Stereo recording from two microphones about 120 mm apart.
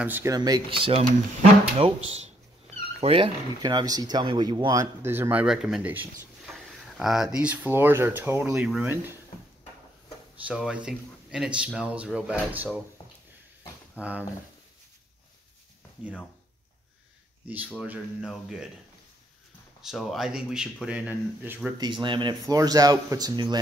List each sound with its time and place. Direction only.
0.0 s speech: 15° right (ahead or behind)
0.3 s speech: 35° right (ahead or behind)
0.7 s speech: 50° right (ahead or behind)
3.6 s speech: 35° right (ahead or behind)
5.0 s speech: 20° right (ahead or behind)
8.5 s speech: 5° right (ahead or behind)
8.8 s speech: 20° right (ahead or behind)
10.4 s speech: 5° right (ahead or behind)
13.9 s speech: 10° right (ahead or behind)
17.7 s speech: 5° right (ahead or behind)
19.8 s speech: 5° right (ahead or behind)
21.7 s speech: 40° right (ahead or behind)
22.6 s speech: 30° right (ahead or behind)